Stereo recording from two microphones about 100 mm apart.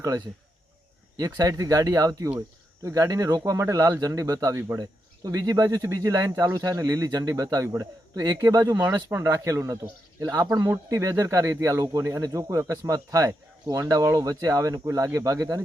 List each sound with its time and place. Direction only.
1.1 s speech: 35° right (ahead or behind)